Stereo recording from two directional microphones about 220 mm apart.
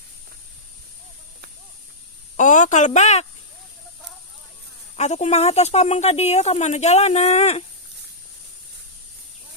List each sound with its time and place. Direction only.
2.3 s speech: 35° left (ahead or behind)
4.9 s speech: 30° left (ahead or behind)